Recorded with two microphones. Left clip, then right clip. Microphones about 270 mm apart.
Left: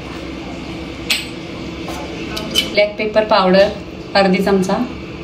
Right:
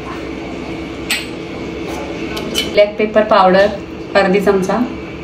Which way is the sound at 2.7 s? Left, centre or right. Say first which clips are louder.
Right 5 dB; left.